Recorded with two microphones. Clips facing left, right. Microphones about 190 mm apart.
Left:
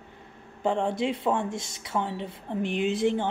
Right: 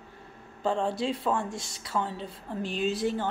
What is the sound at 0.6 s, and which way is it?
A woman's voice, 20° left (ahead or behind).